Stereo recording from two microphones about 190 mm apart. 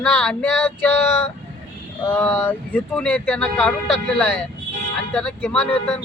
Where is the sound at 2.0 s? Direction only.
10° left (ahead or behind).